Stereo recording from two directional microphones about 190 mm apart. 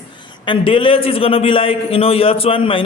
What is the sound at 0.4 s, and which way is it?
A man's voice, 25° left (ahead or behind).